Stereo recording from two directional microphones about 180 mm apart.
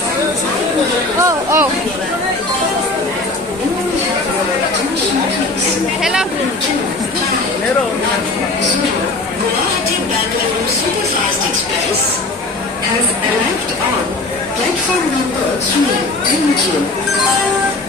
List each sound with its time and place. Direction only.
1.2 s speech: 15° right (ahead or behind)
6.0 s chatter: 5° right (ahead or behind)